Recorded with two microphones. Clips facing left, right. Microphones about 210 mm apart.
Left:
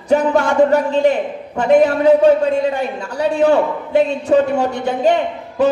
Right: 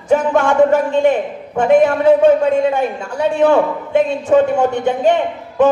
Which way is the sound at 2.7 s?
40° left (ahead or behind).